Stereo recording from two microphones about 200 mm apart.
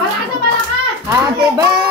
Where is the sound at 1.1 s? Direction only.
15° right (ahead or behind).